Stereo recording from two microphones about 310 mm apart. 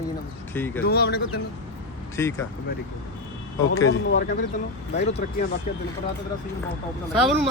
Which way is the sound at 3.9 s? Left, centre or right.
Left.